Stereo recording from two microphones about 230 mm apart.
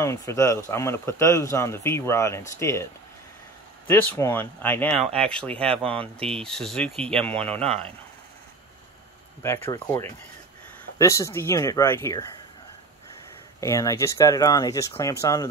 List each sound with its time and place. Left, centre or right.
0.0 s speech: centre
6.1 s speech: right
6.4 s speech: centre
9.4 s speech: centre
13.6 s speech: centre